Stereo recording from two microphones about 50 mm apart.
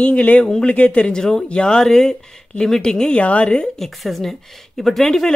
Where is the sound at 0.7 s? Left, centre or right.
Left.